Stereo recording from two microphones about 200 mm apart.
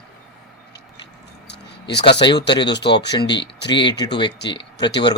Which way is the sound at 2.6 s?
55° left (ahead or behind).